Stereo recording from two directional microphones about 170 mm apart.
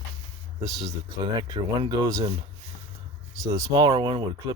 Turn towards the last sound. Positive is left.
turn(degrees=-25)  # may be behind; listen again after turning